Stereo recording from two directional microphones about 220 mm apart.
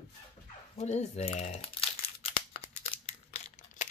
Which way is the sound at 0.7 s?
30° left (ahead or behind).